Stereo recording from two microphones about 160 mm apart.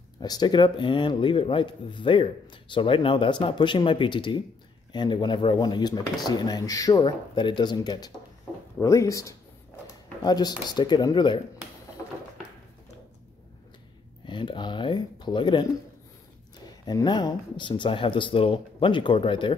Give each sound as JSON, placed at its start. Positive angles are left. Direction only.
{"t": 0.2, "sound": "speech", "side_deg": 25}
{"t": 14.2, "sound": "speech", "side_deg": 30}